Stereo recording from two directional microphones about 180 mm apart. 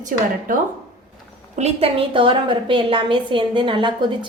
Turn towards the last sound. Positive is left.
turn(degrees=-25)  # may be behind; listen again after turning